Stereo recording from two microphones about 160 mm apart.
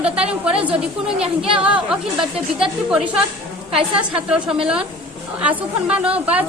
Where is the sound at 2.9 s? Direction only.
5° right (ahead or behind).